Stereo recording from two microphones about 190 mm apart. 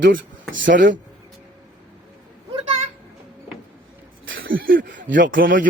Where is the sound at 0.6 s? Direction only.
70° right (ahead or behind).